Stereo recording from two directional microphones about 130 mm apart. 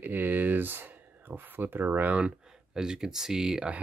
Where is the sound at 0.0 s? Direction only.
15° right (ahead or behind).